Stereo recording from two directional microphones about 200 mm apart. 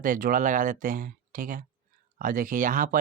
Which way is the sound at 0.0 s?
45° right (ahead or behind).